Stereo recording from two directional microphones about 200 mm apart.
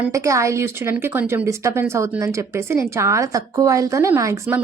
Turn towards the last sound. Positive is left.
turn(degrees=-10)  # may be behind; listen again after turning